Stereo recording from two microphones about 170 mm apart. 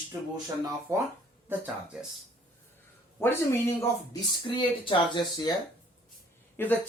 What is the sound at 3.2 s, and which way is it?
Speech, 15° left (ahead or behind).